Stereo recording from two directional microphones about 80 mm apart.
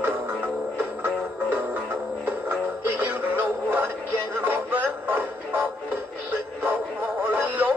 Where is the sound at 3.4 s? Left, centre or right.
Right.